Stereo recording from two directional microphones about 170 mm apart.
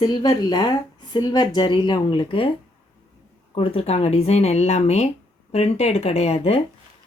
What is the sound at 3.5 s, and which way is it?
Speech, 35° left (ahead or behind).